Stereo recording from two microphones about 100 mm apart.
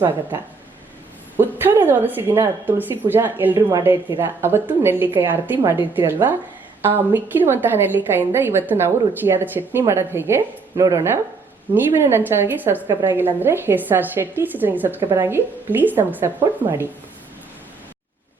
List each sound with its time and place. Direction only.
1.4 s a woman's voice: 20° right (ahead or behind)